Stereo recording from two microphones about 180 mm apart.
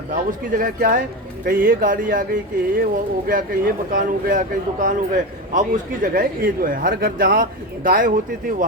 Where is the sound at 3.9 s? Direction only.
50° right (ahead or behind).